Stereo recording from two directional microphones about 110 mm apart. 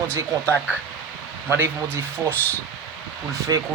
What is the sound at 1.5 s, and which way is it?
Speech, 20° right (ahead or behind).